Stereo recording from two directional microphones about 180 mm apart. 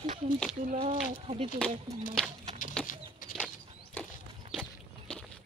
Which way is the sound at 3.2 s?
50° left (ahead or behind).